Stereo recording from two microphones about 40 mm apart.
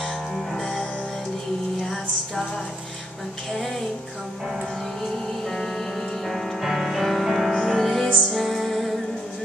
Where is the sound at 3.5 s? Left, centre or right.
Centre.